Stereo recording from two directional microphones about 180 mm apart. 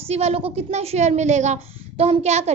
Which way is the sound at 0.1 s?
35° right (ahead or behind).